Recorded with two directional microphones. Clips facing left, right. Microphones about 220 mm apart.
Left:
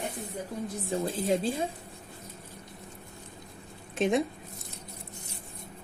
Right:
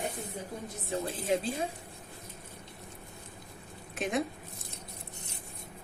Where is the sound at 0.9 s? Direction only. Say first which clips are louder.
Left 2 dB; 30° left (ahead or behind).